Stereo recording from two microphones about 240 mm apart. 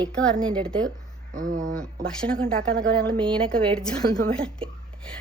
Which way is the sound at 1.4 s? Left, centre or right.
Right.